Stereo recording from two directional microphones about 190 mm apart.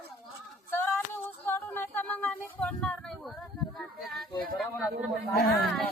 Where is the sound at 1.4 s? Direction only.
10° left (ahead or behind).